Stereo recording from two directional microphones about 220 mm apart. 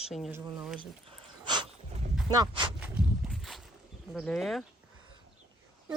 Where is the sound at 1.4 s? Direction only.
20° right (ahead or behind).